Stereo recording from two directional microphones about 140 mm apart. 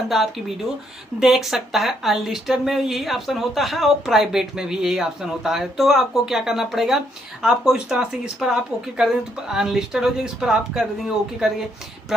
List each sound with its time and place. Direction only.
1.2 s a woman's voice: 5° right (ahead or behind)